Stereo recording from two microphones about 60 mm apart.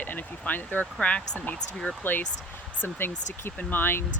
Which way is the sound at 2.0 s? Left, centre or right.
Left.